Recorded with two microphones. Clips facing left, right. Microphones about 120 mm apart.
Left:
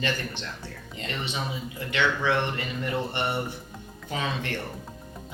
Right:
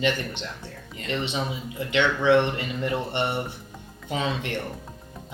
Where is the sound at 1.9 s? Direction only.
25° right (ahead or behind).